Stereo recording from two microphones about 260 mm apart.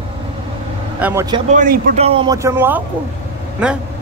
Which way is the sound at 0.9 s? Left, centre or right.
Centre.